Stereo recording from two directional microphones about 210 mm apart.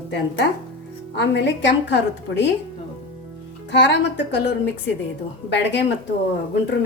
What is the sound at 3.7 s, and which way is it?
A woman's voice, 55° left (ahead or behind).